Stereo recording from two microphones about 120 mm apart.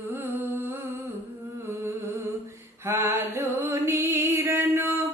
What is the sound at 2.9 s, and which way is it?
Music, 20° right (ahead or behind).